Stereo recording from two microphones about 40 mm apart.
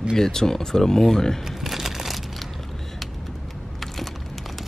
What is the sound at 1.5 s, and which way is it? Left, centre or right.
Crumpling, centre.